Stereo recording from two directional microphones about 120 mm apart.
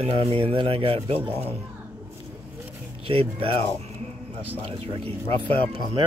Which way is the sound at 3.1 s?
50° right (ahead or behind).